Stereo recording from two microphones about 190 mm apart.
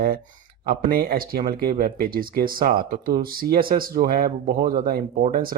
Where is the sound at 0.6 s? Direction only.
50° right (ahead or behind).